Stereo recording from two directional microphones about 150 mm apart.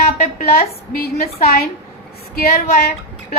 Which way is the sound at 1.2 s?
80° left.